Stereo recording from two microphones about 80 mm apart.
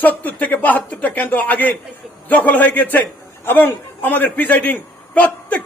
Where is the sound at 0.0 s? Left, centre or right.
Left.